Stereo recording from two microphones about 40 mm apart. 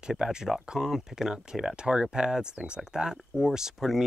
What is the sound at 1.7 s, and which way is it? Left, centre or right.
Speech, right.